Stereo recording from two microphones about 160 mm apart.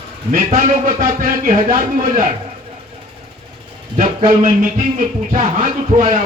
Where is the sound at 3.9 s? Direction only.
55° right (ahead or behind).